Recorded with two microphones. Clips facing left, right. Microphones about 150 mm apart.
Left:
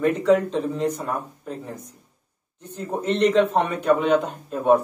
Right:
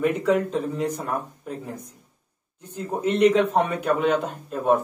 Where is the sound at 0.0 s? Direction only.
10° right (ahead or behind).